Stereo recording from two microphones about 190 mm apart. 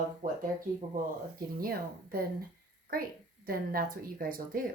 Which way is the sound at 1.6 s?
50° right (ahead or behind).